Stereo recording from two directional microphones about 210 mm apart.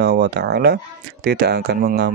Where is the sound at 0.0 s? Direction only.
50° right (ahead or behind).